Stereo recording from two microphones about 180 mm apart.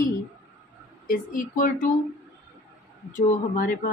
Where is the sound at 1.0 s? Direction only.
50° left (ahead or behind).